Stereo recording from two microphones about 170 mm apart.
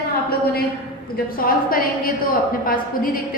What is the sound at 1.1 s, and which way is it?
A woman's voice, 60° left (ahead or behind).